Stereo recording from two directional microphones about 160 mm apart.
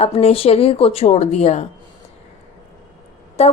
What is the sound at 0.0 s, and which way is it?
A woman's voice, 40° left (ahead or behind).